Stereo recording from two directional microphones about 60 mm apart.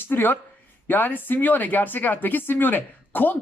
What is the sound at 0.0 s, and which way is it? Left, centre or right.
Speech, left.